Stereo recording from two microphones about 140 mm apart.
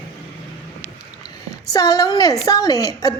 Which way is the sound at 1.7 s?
25° left (ahead or behind).